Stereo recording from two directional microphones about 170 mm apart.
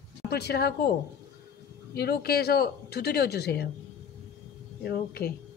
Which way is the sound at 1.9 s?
70° left (ahead or behind).